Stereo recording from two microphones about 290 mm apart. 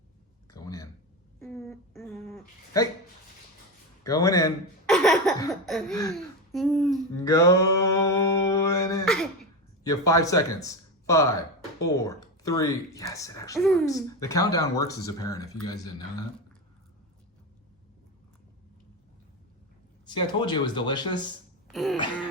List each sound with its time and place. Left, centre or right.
0.5 s a sound: centre
4.0 s speech: centre
4.9 s laughter: centre
5.6 s a sound: centre
7.2 s speech: centre
7.9 s mantra: centre
9.0 s a sound: centre
9.8 s speech: centre
13.6 s a sound: centre
13.8 s speech: centre
20.1 s speech: centre
21.7 s throat clearing: centre